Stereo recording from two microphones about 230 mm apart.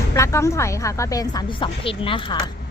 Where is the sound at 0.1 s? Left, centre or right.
Centre.